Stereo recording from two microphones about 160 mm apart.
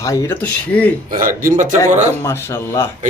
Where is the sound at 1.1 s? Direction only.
60° right (ahead or behind).